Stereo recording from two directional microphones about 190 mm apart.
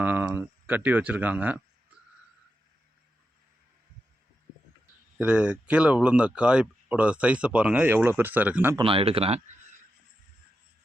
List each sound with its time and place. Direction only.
0.0 s speech: 10° right (ahead or behind)
5.1 s speech: 5° right (ahead or behind)
8.8 s speech: 30° right (ahead or behind)